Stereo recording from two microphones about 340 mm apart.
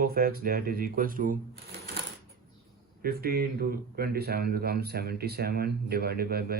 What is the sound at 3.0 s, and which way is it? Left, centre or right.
Speech, right.